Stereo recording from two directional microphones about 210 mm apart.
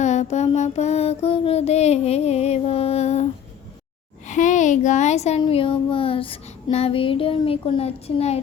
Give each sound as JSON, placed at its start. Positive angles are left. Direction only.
{"t": 0.0, "sound": "mantra", "side_deg": 35}
{"t": 4.3, "sound": "speech", "side_deg": 35}